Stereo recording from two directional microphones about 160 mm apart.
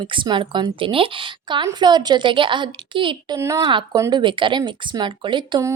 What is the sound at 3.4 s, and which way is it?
Speech, 20° right (ahead or behind).